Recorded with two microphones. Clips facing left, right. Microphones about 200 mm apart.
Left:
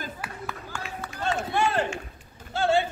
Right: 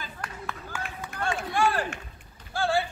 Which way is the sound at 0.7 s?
5° right (ahead or behind).